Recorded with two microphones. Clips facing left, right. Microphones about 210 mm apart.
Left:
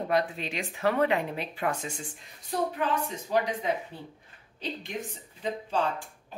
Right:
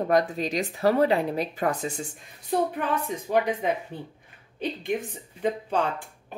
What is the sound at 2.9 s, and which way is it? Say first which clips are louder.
Speech: right 3 dB; 55° right (ahead or behind).